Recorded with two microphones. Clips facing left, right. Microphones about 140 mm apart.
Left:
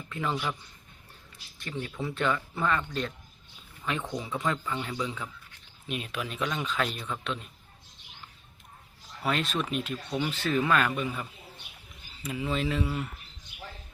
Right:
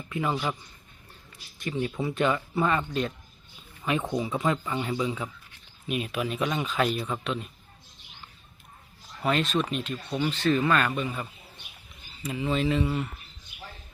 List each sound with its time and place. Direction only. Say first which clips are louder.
0.1 s speech: right 3 dB; 10° right (ahead or behind)
1.5 s speech: right 6 dB; 15° right (ahead or behind)
9.2 s speech: right 4 dB; centre (ahead or behind)
12.3 s speech: right 4 dB; centre (ahead or behind)